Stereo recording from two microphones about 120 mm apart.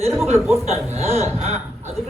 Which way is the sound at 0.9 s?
60° right (ahead or behind).